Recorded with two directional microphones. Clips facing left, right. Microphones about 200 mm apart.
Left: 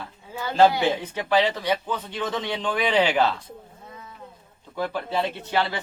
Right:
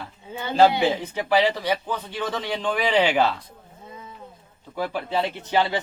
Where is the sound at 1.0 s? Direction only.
10° right (ahead or behind).